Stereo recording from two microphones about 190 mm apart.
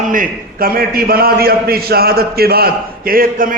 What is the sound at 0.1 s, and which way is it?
A man's voice, 50° right (ahead or behind).